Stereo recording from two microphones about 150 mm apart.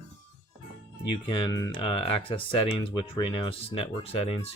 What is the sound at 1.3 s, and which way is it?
Speech, 30° left (ahead or behind).